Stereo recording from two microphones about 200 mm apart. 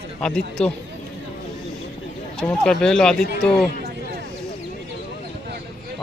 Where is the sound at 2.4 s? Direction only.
Centre (ahead or behind).